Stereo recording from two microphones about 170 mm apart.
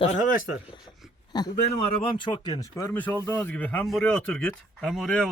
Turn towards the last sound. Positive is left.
turn(degrees=0)  # may be behind; listen again after turning